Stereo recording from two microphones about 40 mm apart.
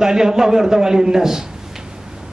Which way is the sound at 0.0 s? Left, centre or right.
Centre.